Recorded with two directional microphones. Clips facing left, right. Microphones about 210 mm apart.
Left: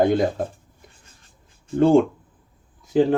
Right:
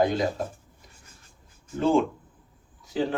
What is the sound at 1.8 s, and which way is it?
Speech, 55° left (ahead or behind).